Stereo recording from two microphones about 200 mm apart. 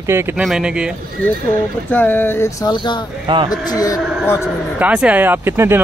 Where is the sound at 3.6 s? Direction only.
15° left (ahead or behind).